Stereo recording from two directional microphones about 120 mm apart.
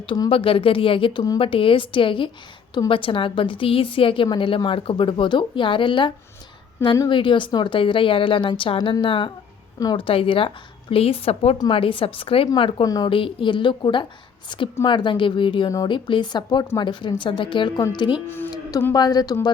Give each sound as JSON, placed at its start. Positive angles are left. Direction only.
{"t": 0.3, "sound": "a woman's voice", "side_deg": 50}
{"t": 6.8, "sound": "a woman's voice", "side_deg": 30}
{"t": 7.1, "sound": "a woman's voice", "side_deg": 45}
{"t": 12.8, "sound": "a woman's voice", "side_deg": 30}
{"t": 13.1, "sound": "a woman's voice", "side_deg": 45}
{"t": 18.3, "sound": "speech", "side_deg": 15}
{"t": 18.9, "sound": "a woman's voice", "side_deg": 35}